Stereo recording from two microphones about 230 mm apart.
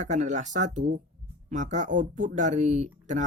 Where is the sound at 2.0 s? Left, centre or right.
Right.